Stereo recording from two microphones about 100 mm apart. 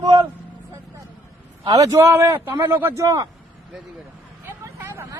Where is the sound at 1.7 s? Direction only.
35° right (ahead or behind).